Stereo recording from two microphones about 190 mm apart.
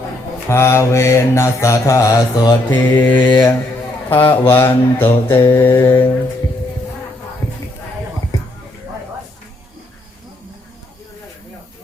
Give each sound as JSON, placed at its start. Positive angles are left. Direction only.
{"t": 0.4, "sound": "mantra", "side_deg": 15}
{"t": 4.1, "sound": "mantra", "side_deg": 10}